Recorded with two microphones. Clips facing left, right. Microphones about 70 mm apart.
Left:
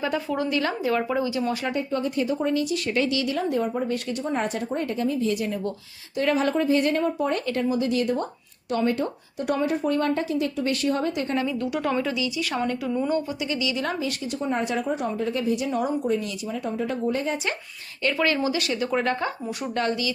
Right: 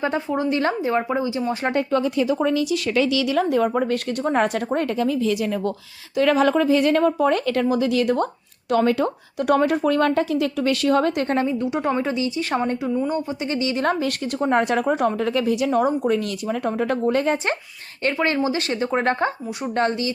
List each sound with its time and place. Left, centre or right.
0.0 s a woman's voice: right
1.7 s speech: right
4.4 s speech: right
8.7 s speech: right
11.3 s a woman's voice: right
14.0 s a woman's voice: right
16.0 s a woman's voice: right
17.3 s a woman's voice: right